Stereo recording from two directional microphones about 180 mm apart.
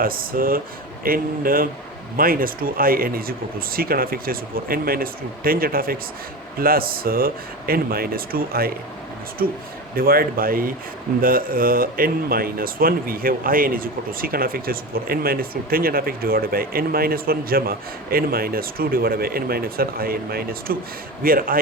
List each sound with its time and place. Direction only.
0.0 s a man's voice: 55° right (ahead or behind)